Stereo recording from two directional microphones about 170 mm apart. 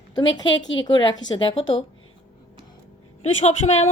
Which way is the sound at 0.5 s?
90° left.